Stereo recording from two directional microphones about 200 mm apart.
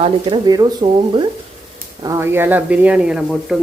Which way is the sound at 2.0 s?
15° right (ahead or behind).